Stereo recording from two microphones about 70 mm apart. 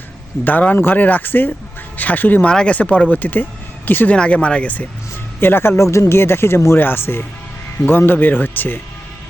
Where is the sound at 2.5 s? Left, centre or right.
Centre.